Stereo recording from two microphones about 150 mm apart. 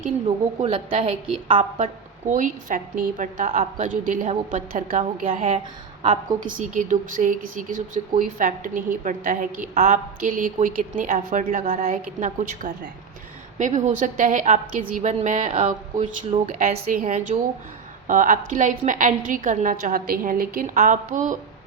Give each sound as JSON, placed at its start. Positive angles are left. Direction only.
{"t": 0.3, "sound": "a woman's voice", "side_deg": -40}
{"t": 1.8, "sound": "a woman's voice", "side_deg": -55}